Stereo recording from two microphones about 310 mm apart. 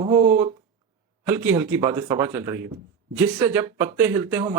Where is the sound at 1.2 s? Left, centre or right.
Centre.